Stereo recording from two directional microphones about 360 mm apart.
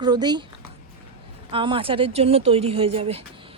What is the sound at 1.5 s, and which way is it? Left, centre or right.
A woman's voice, centre.